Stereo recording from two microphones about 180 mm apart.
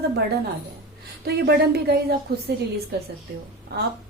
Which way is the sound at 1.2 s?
65° right (ahead or behind).